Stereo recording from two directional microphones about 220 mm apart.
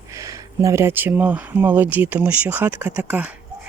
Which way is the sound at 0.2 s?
15° right (ahead or behind).